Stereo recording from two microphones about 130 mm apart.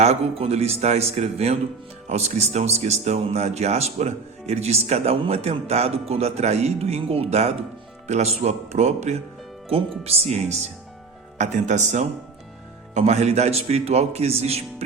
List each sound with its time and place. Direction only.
0.0 s a man's voice: 50° right (ahead or behind)